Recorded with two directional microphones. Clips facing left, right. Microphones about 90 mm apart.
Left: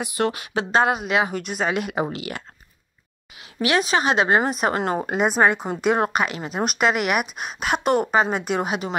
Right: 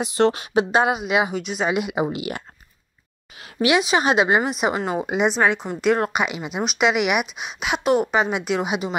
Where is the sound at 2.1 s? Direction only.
20° right (ahead or behind).